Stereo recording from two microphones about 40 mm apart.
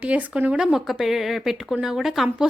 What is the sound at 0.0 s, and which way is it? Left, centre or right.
Speech, right.